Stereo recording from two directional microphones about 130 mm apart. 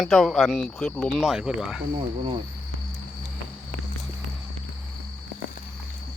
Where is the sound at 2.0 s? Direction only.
45° right (ahead or behind).